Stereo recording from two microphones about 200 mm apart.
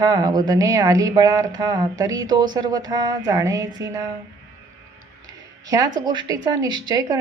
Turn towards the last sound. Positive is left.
turn(degrees=-20)  # may be behind; listen again after turning